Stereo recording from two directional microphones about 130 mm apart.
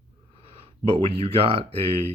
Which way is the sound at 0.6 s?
50° right (ahead or behind).